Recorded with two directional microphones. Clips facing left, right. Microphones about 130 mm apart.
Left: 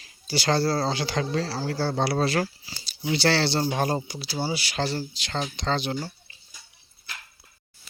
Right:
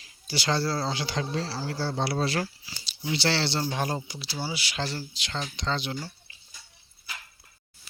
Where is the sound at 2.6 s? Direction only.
40° left (ahead or behind).